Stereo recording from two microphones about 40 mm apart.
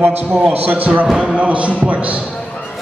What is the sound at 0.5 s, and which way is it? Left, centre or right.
Speech, right.